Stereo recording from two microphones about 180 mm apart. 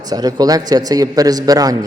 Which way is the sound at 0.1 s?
20° right (ahead or behind).